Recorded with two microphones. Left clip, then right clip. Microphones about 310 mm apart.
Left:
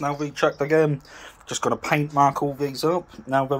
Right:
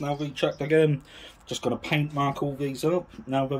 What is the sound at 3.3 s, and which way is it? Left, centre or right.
Speech, left.